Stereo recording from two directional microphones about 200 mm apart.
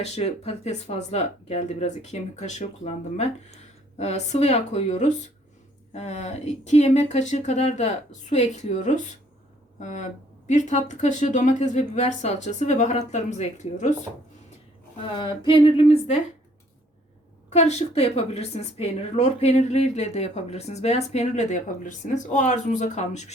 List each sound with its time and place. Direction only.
0.0 s a woman's voice: 30° left (ahead or behind)
15.0 s speech: 25° left (ahead or behind)
17.5 s a woman's voice: 35° left (ahead or behind)